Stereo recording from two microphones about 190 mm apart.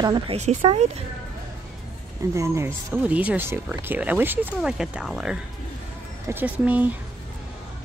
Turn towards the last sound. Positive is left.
turn(degrees=-10)  # may be behind; listen again after turning